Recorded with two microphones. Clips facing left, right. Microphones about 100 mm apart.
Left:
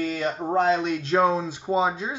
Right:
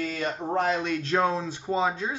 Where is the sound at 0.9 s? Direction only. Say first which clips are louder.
Left 3 dB; 10° left (ahead or behind).